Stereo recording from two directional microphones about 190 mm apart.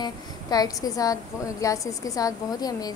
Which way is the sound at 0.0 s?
20° left (ahead or behind).